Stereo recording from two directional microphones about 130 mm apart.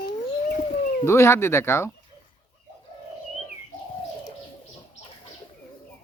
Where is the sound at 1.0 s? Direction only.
20° left (ahead or behind).